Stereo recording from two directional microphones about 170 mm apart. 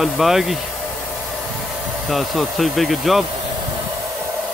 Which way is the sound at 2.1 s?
Centre (ahead or behind).